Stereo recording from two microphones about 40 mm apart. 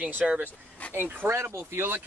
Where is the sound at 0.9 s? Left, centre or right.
Right.